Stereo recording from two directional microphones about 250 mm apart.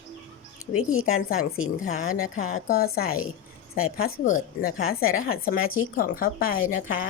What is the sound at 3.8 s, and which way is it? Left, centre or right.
Speech, left.